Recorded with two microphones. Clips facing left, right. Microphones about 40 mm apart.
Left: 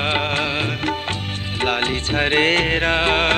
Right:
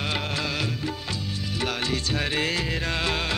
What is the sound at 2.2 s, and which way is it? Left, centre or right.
Music, left.